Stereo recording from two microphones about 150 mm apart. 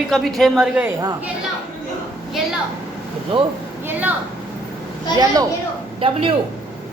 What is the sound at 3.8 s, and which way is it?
Speech, 10° right (ahead or behind).